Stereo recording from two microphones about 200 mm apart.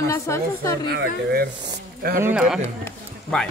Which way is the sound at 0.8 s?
55° right (ahead or behind).